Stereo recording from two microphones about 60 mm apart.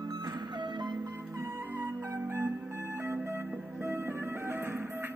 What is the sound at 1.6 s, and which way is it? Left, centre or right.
Music, right.